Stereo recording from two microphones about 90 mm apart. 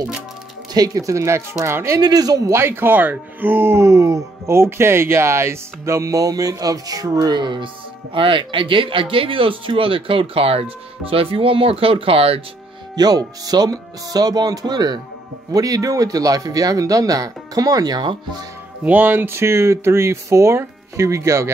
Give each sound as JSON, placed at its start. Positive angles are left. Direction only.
{"t": 0.7, "sound": "speech", "side_deg": -40}
{"t": 2.0, "sound": "speech", "side_deg": -45}
{"t": 2.6, "sound": "speech", "side_deg": -25}
{"t": 7.4, "sound": "speech", "side_deg": -65}
{"t": 12.9, "sound": "speech", "side_deg": -45}
{"t": 18.9, "sound": "speech", "side_deg": -20}